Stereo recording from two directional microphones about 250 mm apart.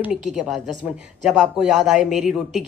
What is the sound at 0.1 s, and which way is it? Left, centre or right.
A woman's voice, centre.